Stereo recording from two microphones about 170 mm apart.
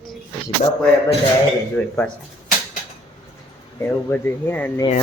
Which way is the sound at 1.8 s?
5° left (ahead or behind).